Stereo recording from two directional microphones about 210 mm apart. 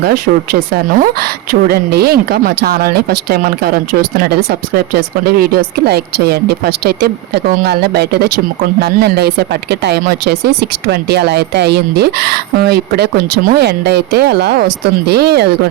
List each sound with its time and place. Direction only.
0.0 s speech: 45° right (ahead or behind)